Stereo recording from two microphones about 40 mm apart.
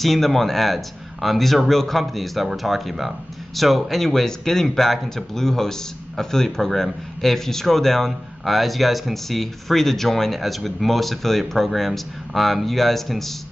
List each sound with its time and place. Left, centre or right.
0.0 s speech: centre